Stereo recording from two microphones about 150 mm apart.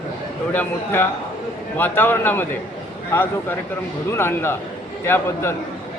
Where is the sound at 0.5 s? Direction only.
10° left (ahead or behind).